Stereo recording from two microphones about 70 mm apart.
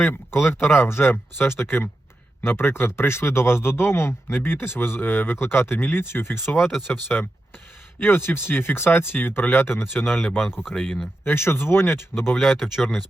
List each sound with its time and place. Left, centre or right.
0.0 s speech: left
6.6 s speech: centre
6.8 s speech: left
10.5 s speech: centre
10.8 s speech: centre
11.3 s speech: left
12.4 s speech: centre